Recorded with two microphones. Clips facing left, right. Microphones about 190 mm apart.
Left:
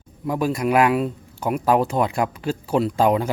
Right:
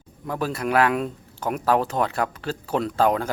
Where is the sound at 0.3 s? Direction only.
10° left (ahead or behind).